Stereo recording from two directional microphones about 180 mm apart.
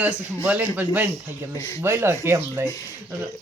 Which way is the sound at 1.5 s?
15° left (ahead or behind).